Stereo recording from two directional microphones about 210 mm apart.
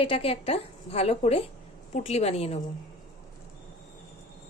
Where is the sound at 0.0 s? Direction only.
25° left (ahead or behind).